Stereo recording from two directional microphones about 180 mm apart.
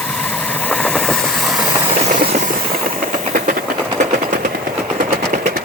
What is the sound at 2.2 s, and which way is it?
Train, 40° right (ahead or behind).